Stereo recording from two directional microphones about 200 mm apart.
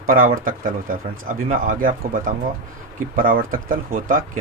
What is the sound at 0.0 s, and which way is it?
Speech, 45° right (ahead or behind).